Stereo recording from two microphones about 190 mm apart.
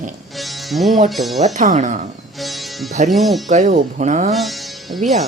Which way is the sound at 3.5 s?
40° right (ahead or behind).